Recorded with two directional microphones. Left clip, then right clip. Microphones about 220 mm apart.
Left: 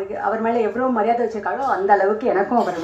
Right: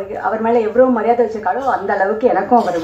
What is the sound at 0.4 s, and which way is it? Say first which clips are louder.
Speech: right 10 dB; 50° left (ahead or behind).